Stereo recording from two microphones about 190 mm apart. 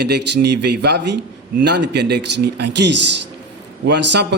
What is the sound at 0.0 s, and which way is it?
A man's voice, 60° right (ahead or behind).